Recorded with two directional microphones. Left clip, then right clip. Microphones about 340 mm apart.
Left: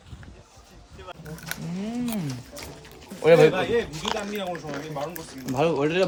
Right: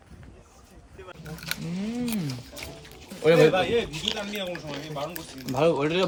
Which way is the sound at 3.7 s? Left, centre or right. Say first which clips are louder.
Left 1 dB; centre.